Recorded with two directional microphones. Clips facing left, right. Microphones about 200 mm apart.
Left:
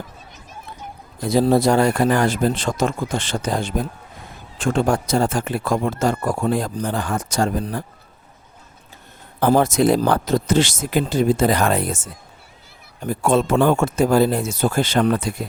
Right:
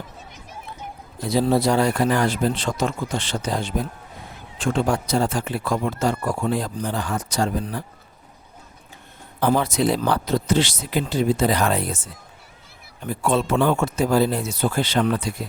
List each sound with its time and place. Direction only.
1.3 s a man's voice: 45° left (ahead or behind)
9.4 s a man's voice: 45° left (ahead or behind)